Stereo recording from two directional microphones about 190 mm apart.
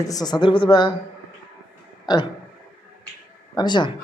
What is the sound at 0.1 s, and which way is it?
Speech, 20° left (ahead or behind).